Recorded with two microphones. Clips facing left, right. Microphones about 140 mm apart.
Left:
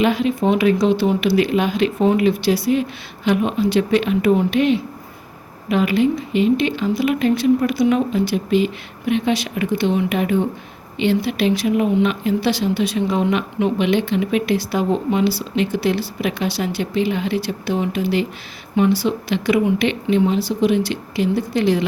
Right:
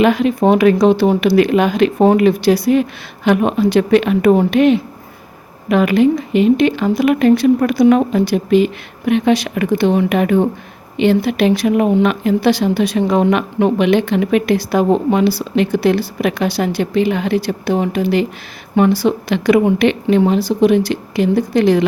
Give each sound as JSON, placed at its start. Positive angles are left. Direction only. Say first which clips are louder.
{"t": 0.0, "sound": "speech", "louder": "right 5 dB", "side_deg": -55}